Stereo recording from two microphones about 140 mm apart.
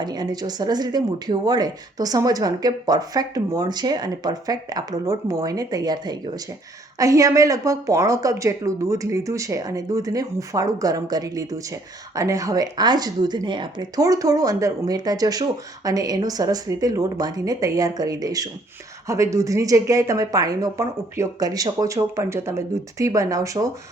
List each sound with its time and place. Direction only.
0.0 s speech: 30° right (ahead or behind)